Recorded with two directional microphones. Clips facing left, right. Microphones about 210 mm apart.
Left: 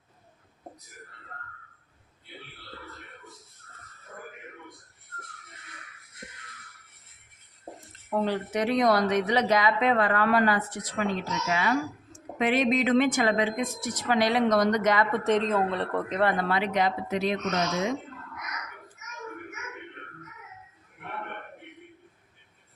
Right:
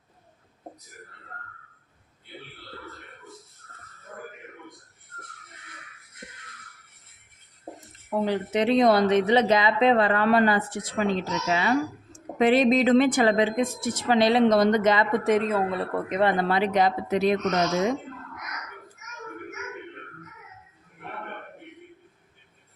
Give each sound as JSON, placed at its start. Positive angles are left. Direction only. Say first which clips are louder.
{"t": 8.1, "sound": "speech", "louder": "right 2 dB", "side_deg": -10}
{"t": 8.5, "sound": "speech", "louder": "right 4 dB", "side_deg": -25}
{"t": 15.2, "sound": "speech", "louder": "right 2 dB", "side_deg": -10}
{"t": 16.4, "sound": "speech", "louder": "right 4 dB", "side_deg": -30}